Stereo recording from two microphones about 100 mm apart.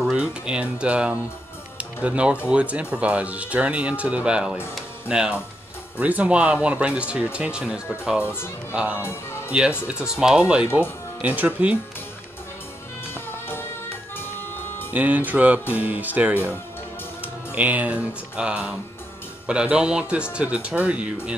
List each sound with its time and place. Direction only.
0.0 s speech: 10° right (ahead or behind)
8.2 s speech: 25° left (ahead or behind)
8.7 s speech: 15° right (ahead or behind)
13.1 s music: 20° left (ahead or behind)
14.9 s speech: 15° right (ahead or behind)